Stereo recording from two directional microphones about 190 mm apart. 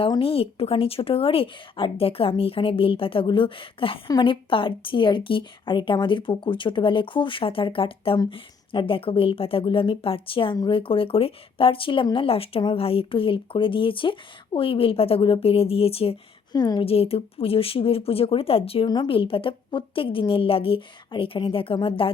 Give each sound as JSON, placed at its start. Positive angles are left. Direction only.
{"t": 0.0, "sound": "speech", "side_deg": 30}